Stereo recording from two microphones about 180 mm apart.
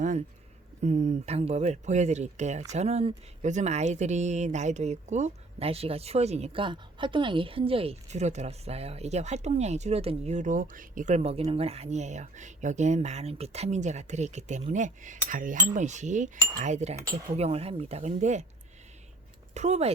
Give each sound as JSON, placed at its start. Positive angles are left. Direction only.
{"t": 0.0, "sound": "a sound", "side_deg": -40}
{"t": 0.8, "sound": "speech", "side_deg": -40}
{"t": 19.5, "sound": "speech", "side_deg": -40}